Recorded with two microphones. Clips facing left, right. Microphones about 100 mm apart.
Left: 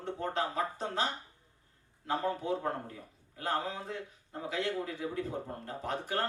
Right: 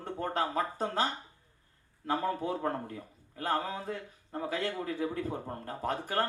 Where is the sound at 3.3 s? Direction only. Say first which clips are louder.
Right 2 dB; 50° right (ahead or behind).